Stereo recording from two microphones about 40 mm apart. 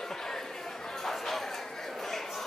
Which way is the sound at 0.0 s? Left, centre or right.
Centre.